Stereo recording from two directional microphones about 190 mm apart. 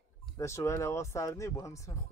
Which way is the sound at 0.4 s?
15° left (ahead or behind).